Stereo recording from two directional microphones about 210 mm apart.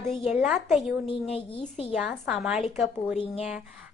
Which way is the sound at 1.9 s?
5° right (ahead or behind).